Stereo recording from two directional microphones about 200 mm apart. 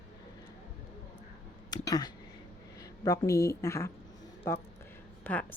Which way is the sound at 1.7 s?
20° left (ahead or behind).